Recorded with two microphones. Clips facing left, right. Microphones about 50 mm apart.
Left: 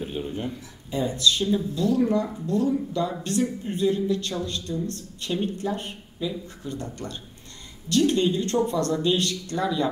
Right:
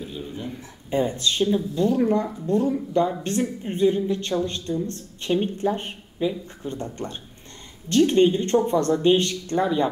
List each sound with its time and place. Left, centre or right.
0.0 s speech: left
0.8 s speech: right